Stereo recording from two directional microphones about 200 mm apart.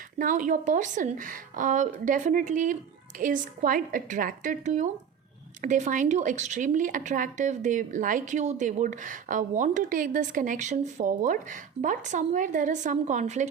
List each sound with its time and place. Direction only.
0.2 s a woman's voice: 40° right (ahead or behind)